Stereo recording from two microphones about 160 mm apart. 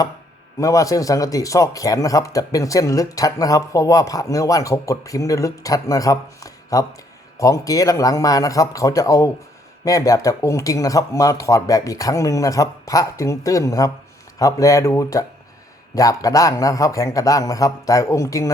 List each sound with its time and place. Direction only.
0.6 s a man's voice: 20° left (ahead or behind)